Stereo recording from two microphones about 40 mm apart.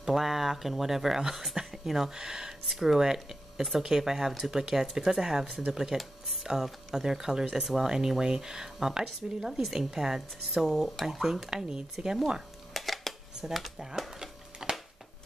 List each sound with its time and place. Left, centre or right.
0.0 s speech: centre
5.9 s speech: centre
6.4 s speech: centre
12.7 s a sound: centre
13.4 s speech: right
13.9 s typewriter: centre